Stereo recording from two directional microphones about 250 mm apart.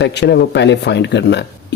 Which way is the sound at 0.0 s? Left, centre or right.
Left.